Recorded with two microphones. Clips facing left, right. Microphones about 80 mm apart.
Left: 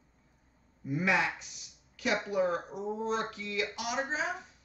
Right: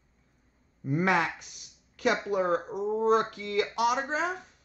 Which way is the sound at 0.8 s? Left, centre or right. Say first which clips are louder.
Right 3 dB; right.